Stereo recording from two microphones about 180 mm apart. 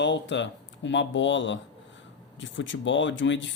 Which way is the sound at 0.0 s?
85° left.